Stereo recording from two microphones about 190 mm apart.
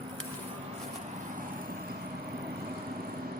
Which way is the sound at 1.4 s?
50° right (ahead or behind).